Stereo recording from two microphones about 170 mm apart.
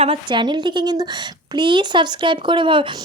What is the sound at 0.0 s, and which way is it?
A woman's voice, 30° right (ahead or behind).